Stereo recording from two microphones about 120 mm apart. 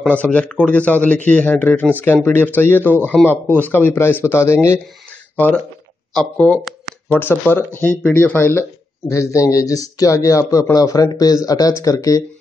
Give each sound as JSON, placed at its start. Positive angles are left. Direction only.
{"t": 0.0, "sound": "a man's voice", "side_deg": 10}